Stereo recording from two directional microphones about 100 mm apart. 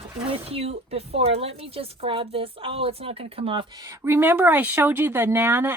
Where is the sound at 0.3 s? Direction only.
70° right (ahead or behind).